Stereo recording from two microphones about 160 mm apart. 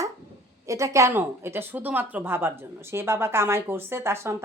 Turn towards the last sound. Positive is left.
turn(degrees=-15)  # may be behind; listen again after turning